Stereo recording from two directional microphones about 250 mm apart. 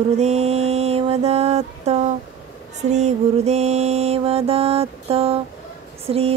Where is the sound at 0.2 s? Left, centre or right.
Right.